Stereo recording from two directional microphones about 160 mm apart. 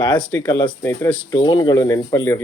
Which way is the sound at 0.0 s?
25° left (ahead or behind).